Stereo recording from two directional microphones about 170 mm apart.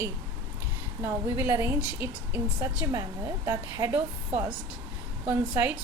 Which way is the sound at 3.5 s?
20° right (ahead or behind).